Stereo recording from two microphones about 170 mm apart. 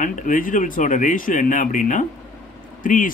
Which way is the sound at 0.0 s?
50° left (ahead or behind).